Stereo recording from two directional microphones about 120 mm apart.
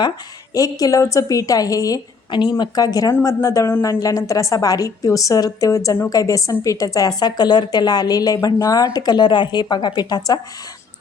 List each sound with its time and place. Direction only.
0.5 s a woman's voice: 30° left (ahead or behind)